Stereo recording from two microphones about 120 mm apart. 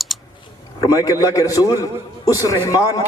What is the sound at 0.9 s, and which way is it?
A man's voice, 30° left (ahead or behind).